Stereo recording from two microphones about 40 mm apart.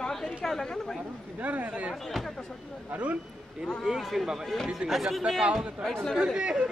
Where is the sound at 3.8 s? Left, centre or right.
Centre.